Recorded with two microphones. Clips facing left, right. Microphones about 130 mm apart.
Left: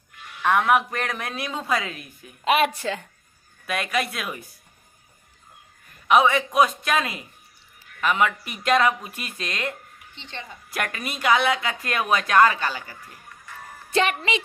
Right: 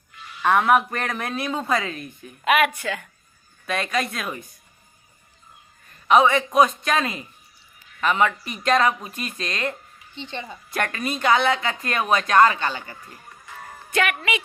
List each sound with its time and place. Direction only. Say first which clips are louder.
0.4 s speech: right 2 dB; centre (ahead or behind)
2.4 s a woman's voice: right 1 dB; 30° left (ahead or behind)
3.7 s speech: right 1 dB; 5° left (ahead or behind)
6.1 s speech: right 1 dB; 5° left (ahead or behind)
10.3 s a woman's voice: right 3 dB; 20° right (ahead or behind)
10.8 s speech: right 4 dB; 5° left (ahead or behind)
13.9 s a woman's voice: left 1 dB; 30° left (ahead or behind)